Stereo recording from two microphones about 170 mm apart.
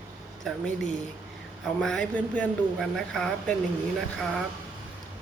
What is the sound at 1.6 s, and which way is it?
A woman's voice, 5° left (ahead or behind).